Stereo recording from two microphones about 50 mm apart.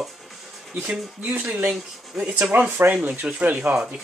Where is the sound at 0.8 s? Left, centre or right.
Right.